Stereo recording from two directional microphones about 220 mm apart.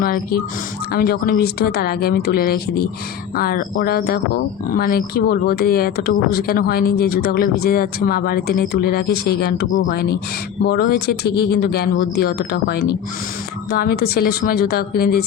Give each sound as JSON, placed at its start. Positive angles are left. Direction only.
{"t": 0.0, "sound": "speech", "side_deg": 45}